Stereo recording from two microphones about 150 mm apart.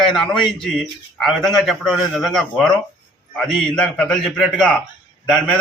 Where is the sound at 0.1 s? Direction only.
5° left (ahead or behind).